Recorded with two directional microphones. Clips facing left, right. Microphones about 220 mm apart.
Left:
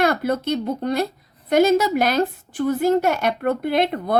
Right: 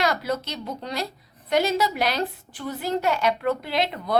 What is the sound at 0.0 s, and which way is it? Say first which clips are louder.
A woman's voice: left 5 dB; 55° left (ahead or behind).